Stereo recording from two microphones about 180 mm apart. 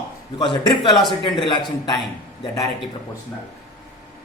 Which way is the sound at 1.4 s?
25° left (ahead or behind).